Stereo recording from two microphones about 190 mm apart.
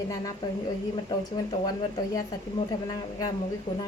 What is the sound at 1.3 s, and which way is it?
Speech, 20° left (ahead or behind).